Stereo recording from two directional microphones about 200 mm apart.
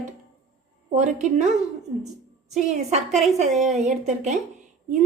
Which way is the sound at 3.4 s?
35° right (ahead or behind).